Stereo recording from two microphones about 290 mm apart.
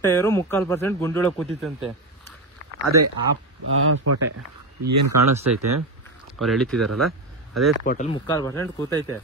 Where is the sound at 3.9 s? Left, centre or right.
Right.